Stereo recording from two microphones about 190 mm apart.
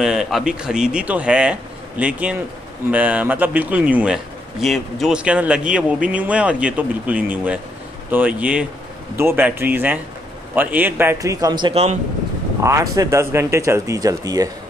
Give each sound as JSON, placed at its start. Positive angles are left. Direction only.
{"t": 0.0, "sound": "speech", "side_deg": 0}
{"t": 12.6, "sound": "speech", "side_deg": -15}